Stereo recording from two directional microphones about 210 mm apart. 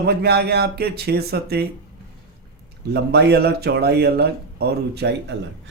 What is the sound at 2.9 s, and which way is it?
A man's voice, 50° right (ahead or behind).